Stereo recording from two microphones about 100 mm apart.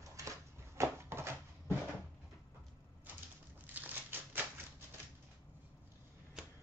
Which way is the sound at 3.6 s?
20° right (ahead or behind).